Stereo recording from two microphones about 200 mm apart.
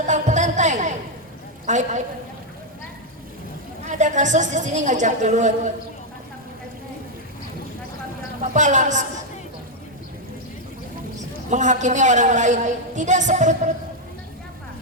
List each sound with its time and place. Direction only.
0.1 s a sound: 35° right (ahead or behind)
1.6 s a man's voice: 35° right (ahead or behind)
3.8 s a woman's voice: 35° right (ahead or behind)
8.5 s a woman's voice: 40° right (ahead or behind)
11.5 s a woman's voice: 35° right (ahead or behind)